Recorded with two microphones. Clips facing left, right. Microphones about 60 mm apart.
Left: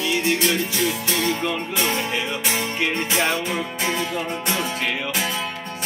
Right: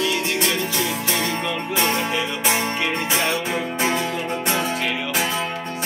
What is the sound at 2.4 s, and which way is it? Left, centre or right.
Music, right.